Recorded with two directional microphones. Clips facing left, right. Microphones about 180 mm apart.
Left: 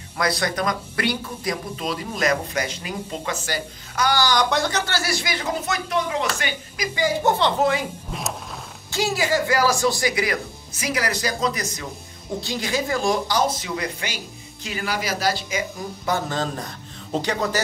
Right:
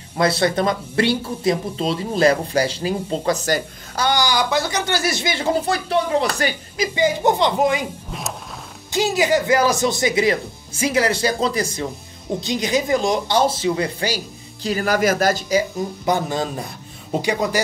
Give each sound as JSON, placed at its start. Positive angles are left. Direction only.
{"t": 0.1, "sound": "speech", "side_deg": -25}
{"t": 4.0, "sound": "speech", "side_deg": -15}
{"t": 4.7, "sound": "speech", "side_deg": -15}
{"t": 7.0, "sound": "speech", "side_deg": -15}
{"t": 8.1, "sound": "music", "side_deg": 0}
{"t": 8.9, "sound": "speech", "side_deg": -20}
{"t": 12.4, "sound": "speech", "side_deg": -20}
{"t": 16.1, "sound": "speech", "side_deg": -10}